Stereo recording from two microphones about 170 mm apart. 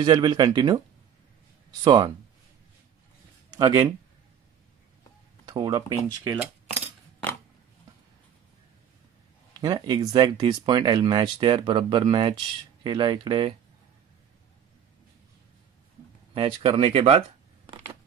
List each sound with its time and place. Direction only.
0.0 s speech: 25° right (ahead or behind)
1.9 s speech: 25° right (ahead or behind)
3.5 s speech: 20° right (ahead or behind)
5.5 s speech: 20° right (ahead or behind)
9.6 s speech: 25° right (ahead or behind)
16.3 s speech: 30° right (ahead or behind)